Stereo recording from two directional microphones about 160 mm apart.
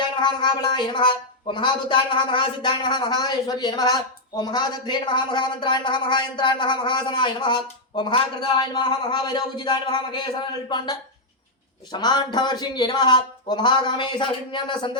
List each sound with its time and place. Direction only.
0.2 s a woman's voice: 30° left (ahead or behind)